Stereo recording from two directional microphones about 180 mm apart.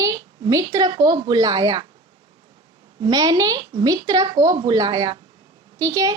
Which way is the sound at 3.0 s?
20° right (ahead or behind).